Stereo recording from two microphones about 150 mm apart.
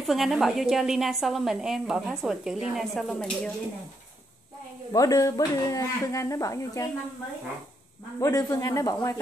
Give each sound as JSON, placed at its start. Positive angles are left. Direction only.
{"t": 0.0, "sound": "speech", "side_deg": 0}
{"t": 4.9, "sound": "speech", "side_deg": 20}
{"t": 8.2, "sound": "speech", "side_deg": 25}